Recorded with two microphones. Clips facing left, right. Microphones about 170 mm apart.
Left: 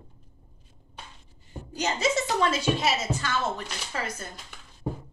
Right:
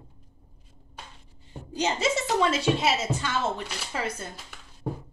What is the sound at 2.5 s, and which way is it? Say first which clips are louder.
A woman's voice: right 1 dB; 25° right (ahead or behind).